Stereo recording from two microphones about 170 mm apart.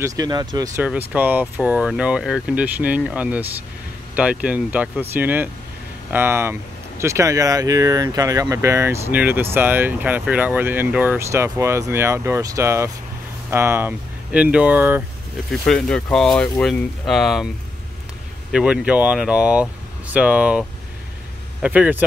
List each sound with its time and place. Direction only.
0.0 s speech: 20° right (ahead or behind)
0.8 s speech: 10° right (ahead or behind)
15.5 s speech: 5° left (ahead or behind)
18.5 s speech: 5° right (ahead or behind)